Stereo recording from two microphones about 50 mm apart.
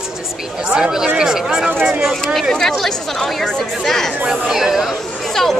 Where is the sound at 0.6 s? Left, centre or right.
Centre.